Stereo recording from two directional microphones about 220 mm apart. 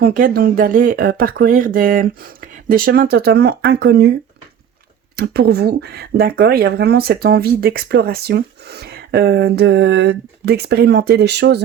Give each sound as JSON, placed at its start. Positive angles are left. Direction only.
{"t": 0.0, "sound": "speech", "side_deg": -40}
{"t": 5.1, "sound": "speech", "side_deg": -45}